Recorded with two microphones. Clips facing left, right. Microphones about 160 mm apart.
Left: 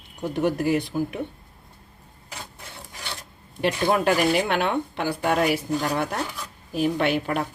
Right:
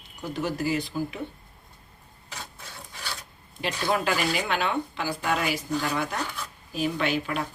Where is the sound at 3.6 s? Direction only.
50° left (ahead or behind).